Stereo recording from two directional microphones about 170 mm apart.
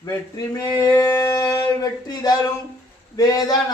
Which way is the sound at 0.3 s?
20° left (ahead or behind).